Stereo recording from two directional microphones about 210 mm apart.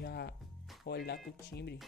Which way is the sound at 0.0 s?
50° left (ahead or behind).